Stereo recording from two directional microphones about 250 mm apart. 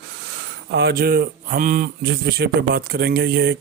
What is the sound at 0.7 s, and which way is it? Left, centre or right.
A man's voice, right.